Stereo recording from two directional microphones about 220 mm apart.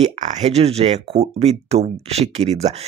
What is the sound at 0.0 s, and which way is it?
Speech, 30° right (ahead or behind).